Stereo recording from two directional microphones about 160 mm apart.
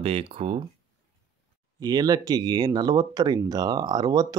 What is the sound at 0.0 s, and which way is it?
Speech, 35° right (ahead or behind).